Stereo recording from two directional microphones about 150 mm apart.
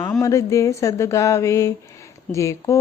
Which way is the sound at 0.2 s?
20° left (ahead or behind).